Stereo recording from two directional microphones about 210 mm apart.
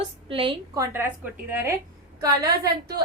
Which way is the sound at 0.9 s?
10° right (ahead or behind).